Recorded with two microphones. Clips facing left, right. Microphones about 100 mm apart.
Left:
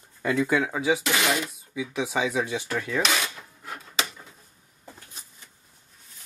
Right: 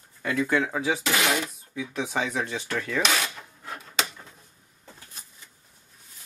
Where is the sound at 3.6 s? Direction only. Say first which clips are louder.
Even; 5° left (ahead or behind).